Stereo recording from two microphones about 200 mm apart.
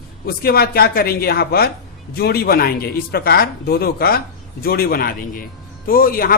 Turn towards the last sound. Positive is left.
turn(degrees=45)  # may be behind; listen again after turning